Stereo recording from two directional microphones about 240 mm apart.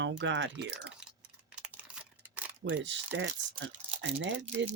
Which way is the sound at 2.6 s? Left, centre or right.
Right.